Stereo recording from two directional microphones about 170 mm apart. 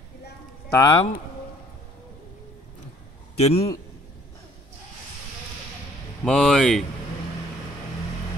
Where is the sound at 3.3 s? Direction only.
35° left (ahead or behind).